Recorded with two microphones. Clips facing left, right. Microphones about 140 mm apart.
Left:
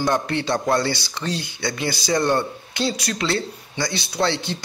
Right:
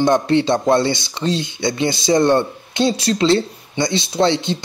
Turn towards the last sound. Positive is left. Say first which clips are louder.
# right 6 dB
turn(degrees=-20)  # may be behind; listen again after turning